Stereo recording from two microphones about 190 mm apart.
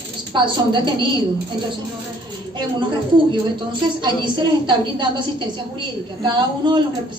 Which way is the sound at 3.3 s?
25° right (ahead or behind).